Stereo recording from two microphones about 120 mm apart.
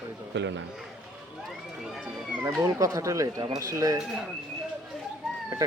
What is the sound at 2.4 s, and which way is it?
Speech, 30° right (ahead or behind).